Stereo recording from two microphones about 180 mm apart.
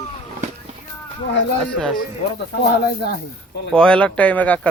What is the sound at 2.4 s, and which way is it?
Speech, 75° left (ahead or behind).